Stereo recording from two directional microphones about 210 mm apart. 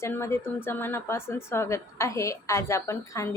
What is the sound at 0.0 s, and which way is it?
Speech, 10° left (ahead or behind).